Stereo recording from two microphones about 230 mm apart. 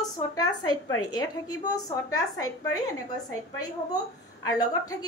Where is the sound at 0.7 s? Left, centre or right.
Left.